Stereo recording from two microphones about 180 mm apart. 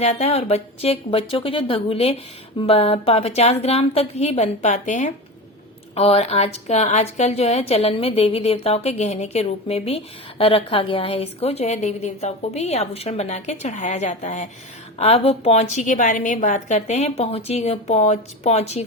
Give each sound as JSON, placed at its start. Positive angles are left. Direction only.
{"t": 0.0, "sound": "a woman's voice", "side_deg": 35}